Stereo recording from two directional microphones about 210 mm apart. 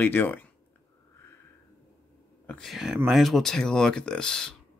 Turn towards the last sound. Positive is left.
turn(degrees=5)  # may be behind; listen again after turning